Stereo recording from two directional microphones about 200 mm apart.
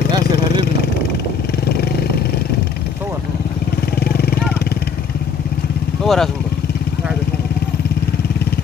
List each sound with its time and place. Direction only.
4.0 s vehicle: 50° left (ahead or behind)
6.0 s speech: centre (ahead or behind)